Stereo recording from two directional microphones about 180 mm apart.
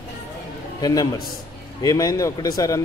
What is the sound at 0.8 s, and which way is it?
A man's voice, 20° left (ahead or behind).